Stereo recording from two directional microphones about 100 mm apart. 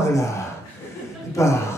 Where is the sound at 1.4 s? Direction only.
30° left (ahead or behind).